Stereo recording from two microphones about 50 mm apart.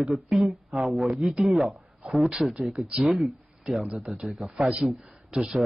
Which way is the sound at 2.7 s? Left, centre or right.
Centre.